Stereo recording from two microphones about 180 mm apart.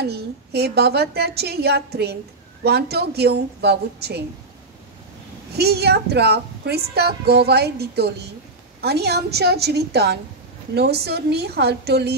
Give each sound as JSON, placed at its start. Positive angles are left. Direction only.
{"t": 0.0, "sound": "speech", "side_deg": -65}
{"t": 5.6, "sound": "speech", "side_deg": -65}